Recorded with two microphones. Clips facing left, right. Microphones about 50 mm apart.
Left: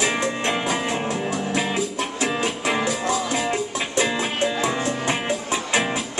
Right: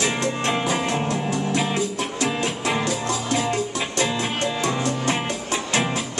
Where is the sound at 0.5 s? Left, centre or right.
Centre.